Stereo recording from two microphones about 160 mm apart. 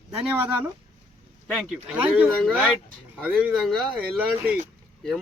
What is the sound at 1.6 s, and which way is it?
Speech, 10° right (ahead or behind).